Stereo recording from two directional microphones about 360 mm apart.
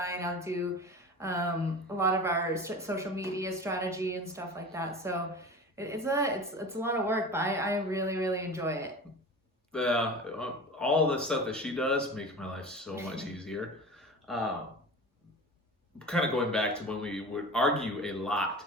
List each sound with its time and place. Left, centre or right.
0.0 s a sound: centre
2.0 s a woman's voice: centre
16.0 s speech: centre